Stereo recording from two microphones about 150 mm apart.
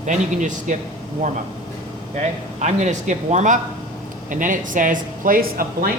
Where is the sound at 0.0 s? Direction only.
55° right (ahead or behind).